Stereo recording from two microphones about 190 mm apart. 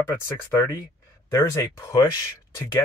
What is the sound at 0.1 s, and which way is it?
Speech, 15° left (ahead or behind).